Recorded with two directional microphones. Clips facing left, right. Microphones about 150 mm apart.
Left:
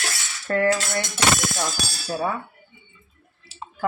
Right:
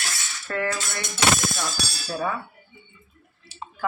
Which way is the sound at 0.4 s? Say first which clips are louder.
Left 6 dB; 40° left (ahead or behind).